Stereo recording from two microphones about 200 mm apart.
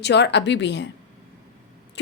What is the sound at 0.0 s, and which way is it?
Speech, 60° left (ahead or behind).